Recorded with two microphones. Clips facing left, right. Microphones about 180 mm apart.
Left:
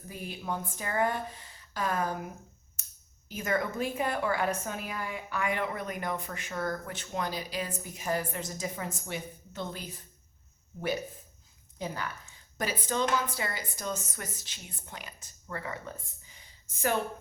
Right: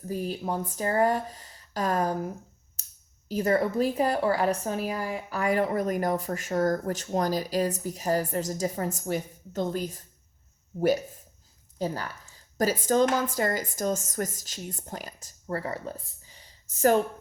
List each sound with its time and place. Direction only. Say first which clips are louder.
0.1 s a woman's voice: right 6 dB; 35° right (ahead or behind)
2.8 s a sound: even; 35° right (ahead or behind)
3.2 s a woman's voice: right 7 dB; 35° right (ahead or behind)